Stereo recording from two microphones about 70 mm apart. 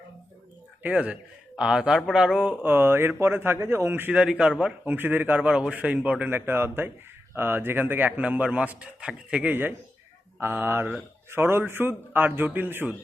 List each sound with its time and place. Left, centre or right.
0.8 s a man's voice: centre
2.4 s speech: right
4.1 s a man's voice: centre
4.9 s a man's voice: right
5.5 s a man's voice: centre; by 12.9 s right